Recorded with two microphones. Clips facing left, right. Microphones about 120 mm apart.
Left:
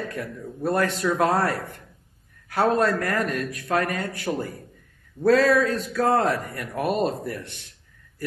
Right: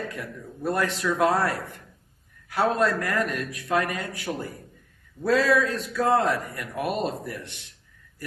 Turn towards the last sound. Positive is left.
turn(degrees=40)  # may be behind; listen again after turning